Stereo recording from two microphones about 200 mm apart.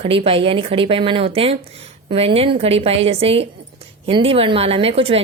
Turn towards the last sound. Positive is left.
turn(degrees=-30)  # may be behind; listen again after turning